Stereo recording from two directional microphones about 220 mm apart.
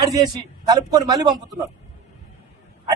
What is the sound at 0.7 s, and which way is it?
Speech, 20° right (ahead or behind).